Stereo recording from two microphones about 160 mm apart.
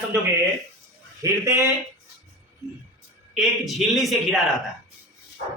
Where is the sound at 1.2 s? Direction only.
20° right (ahead or behind).